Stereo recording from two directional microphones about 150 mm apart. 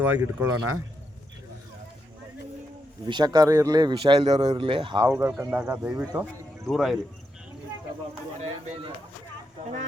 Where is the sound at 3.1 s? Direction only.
30° right (ahead or behind).